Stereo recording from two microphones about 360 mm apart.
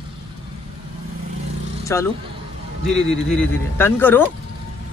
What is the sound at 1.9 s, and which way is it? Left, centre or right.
Speech, centre.